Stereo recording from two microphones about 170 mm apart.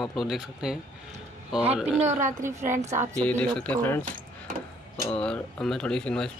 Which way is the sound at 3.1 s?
5° left (ahead or behind).